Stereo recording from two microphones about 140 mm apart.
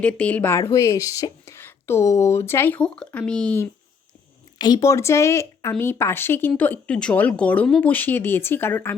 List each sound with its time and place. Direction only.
0.0 s speech: 10° left (ahead or behind)
4.5 s speech: 30° left (ahead or behind); by 9.0 s 15° left (ahead or behind)